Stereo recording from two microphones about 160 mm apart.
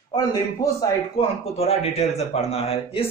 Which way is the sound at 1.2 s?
40° left (ahead or behind).